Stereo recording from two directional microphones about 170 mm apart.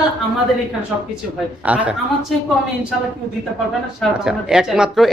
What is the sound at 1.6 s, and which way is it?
Speech, 10° right (ahead or behind).